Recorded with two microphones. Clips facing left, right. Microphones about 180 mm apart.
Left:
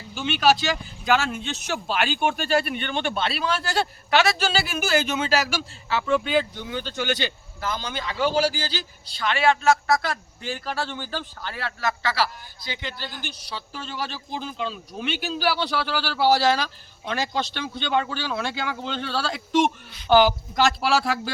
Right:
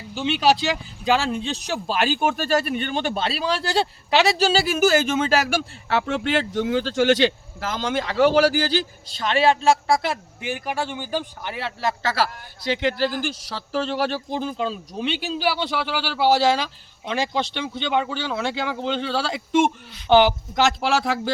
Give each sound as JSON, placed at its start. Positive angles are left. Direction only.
{"t": 0.1, "sound": "speech", "side_deg": -30}
{"t": 8.2, "sound": "speech", "side_deg": -70}
{"t": 12.6, "sound": "speech", "side_deg": -90}
{"t": 15.2, "sound": "a man's voice", "side_deg": -20}
{"t": 18.3, "sound": "a man's voice", "side_deg": 0}
{"t": 19.6, "sound": "speech", "side_deg": -20}